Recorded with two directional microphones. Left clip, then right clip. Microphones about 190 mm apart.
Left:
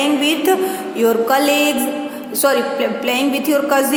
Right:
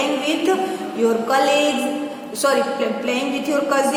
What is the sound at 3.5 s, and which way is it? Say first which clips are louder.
Music: left 3 dB; 45° left (ahead or behind).